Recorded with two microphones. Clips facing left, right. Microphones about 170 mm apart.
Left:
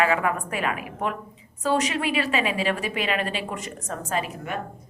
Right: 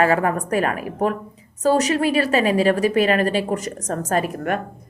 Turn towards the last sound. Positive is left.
turn(degrees=-55)  # may be behind; listen again after turning